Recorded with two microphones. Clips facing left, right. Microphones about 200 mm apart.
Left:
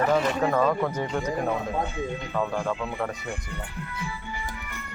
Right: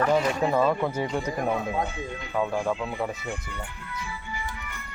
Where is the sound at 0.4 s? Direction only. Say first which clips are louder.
Even; 10° right (ahead or behind).